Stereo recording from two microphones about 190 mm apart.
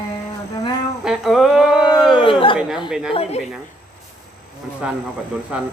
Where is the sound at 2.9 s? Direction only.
5° right (ahead or behind).